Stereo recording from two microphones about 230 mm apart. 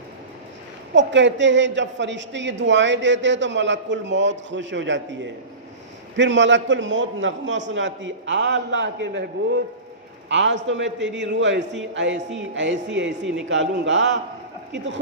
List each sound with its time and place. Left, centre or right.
0.9 s a man's voice: right